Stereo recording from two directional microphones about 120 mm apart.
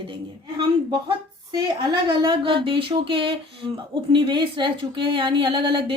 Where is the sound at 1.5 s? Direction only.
35° right (ahead or behind).